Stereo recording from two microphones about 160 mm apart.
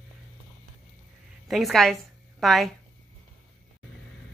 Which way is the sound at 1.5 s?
Centre (ahead or behind).